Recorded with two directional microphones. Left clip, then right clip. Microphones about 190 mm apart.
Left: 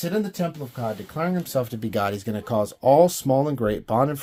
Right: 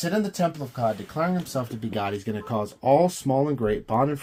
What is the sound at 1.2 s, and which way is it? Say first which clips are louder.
Speech: left 1 dB; 45° left (ahead or behind).